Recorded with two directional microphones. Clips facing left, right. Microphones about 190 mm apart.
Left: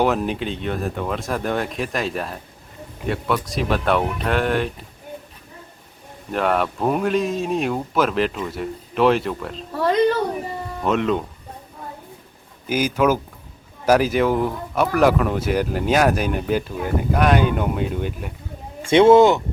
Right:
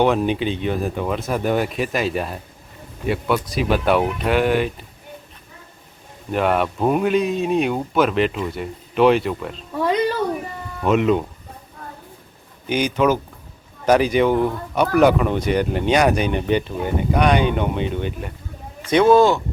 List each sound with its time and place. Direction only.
0.0 s speech: centre (ahead or behind)
6.3 s speech: centre (ahead or behind)
10.8 s speech: 5° right (ahead or behind)
12.6 s speech: 5° left (ahead or behind)
18.9 s speech: 25° left (ahead or behind)